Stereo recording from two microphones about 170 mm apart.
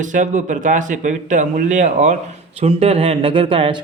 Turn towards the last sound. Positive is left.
turn(degrees=-30)  # may be behind; listen again after turning